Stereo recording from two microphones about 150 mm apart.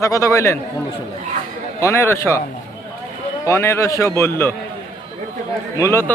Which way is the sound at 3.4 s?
20° left (ahead or behind).